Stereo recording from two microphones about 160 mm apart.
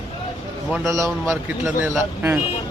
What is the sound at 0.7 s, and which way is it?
Speech, centre (ahead or behind).